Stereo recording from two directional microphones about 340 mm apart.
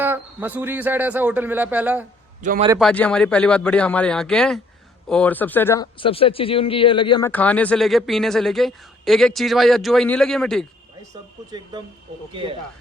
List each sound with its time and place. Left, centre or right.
0.0 s speech: centre
2.4 s a man's voice: right
2.6 s speech: centre
12.3 s speech: centre